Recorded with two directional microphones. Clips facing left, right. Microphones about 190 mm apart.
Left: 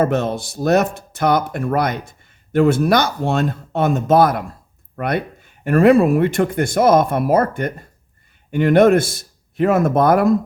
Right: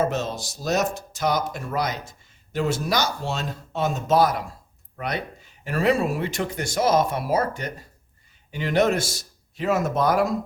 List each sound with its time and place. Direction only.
0.0 s speech: 55° left (ahead or behind)